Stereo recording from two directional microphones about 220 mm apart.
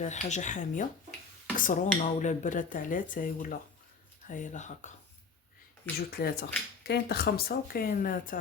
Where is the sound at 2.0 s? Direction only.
35° left (ahead or behind).